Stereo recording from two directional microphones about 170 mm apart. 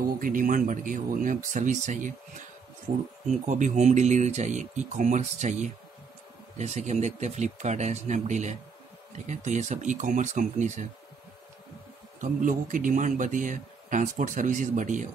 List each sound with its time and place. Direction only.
0.0 s a man's voice: 55° right (ahead or behind)
3.3 s a man's voice: 45° right (ahead or behind)
12.2 s a man's voice: 50° right (ahead or behind)